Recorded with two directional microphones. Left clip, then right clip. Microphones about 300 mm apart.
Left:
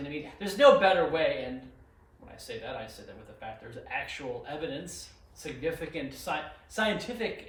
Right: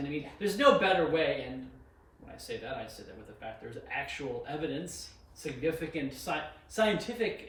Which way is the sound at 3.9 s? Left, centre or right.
Centre.